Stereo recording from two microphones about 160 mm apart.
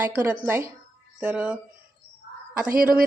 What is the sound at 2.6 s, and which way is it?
Speech, 65° right (ahead or behind).